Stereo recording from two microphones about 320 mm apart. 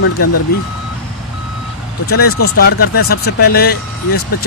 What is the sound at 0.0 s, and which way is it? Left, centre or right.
Speech, left.